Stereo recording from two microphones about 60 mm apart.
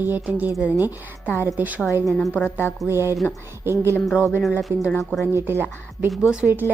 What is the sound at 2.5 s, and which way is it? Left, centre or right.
Music, left.